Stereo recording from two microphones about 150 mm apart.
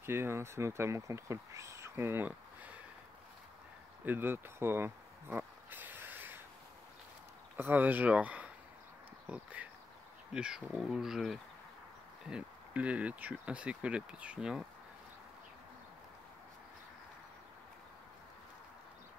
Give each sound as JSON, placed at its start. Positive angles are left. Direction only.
{"t": 0.0, "sound": "speech", "side_deg": -15}
{"t": 4.0, "sound": "speech", "side_deg": -15}
{"t": 5.4, "sound": "a sound", "side_deg": -10}
{"t": 7.5, "sound": "speech", "side_deg": -15}